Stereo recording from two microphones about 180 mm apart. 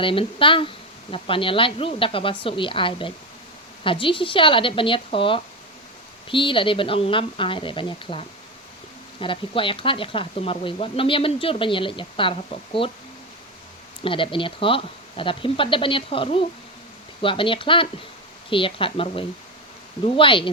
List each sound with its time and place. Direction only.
0.0 s speech: 30° left (ahead or behind)
9.2 s speech: 30° left (ahead or behind)
14.0 s speech: 30° left (ahead or behind)